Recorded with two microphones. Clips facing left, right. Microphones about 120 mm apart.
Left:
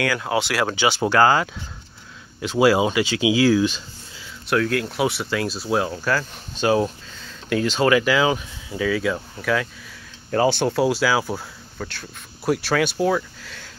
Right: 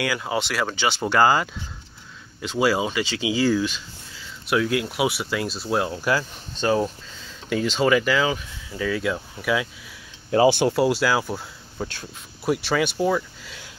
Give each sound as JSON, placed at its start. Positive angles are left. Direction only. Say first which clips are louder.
{"t": 0.0, "sound": "speech", "louder": "left 3 dB", "side_deg": -5}
{"t": 1.2, "sound": "speech", "louder": "left 1 dB", "side_deg": -5}
{"t": 2.4, "sound": "speech", "louder": "left 4 dB", "side_deg": 10}
{"t": 4.5, "sound": "speech", "louder": "left 1 dB", "side_deg": -10}
{"t": 5.9, "sound": "speech", "louder": "even", "side_deg": -10}
{"t": 6.5, "sound": "speech", "louder": "left 2 dB", "side_deg": 5}
{"t": 8.3, "sound": "speech", "louder": "left 4 dB", "side_deg": 20}
{"t": 8.7, "sound": "speech", "louder": "left 3 dB", "side_deg": 5}
{"t": 9.4, "sound": "speech", "louder": "left 1 dB", "side_deg": -10}
{"t": 10.8, "sound": "speech", "louder": "left 1 dB", "side_deg": 0}
{"t": 11.8, "sound": "speech", "louder": "right 2 dB", "side_deg": -15}
{"t": 12.4, "sound": "speech", "louder": "left 2 dB", "side_deg": 0}